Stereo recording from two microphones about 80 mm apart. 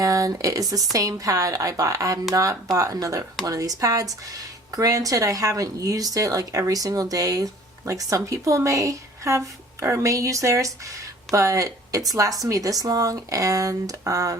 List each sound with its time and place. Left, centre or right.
0.0 s speech: right